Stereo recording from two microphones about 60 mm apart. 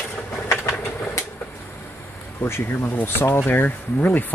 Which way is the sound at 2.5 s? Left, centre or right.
Left.